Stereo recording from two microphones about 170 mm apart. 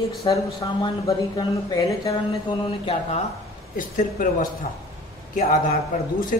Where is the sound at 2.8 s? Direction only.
35° left (ahead or behind).